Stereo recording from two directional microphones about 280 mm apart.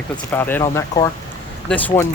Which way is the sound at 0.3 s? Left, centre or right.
Centre.